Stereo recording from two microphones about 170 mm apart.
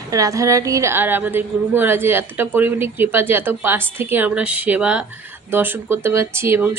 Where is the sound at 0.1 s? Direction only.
20° right (ahead or behind).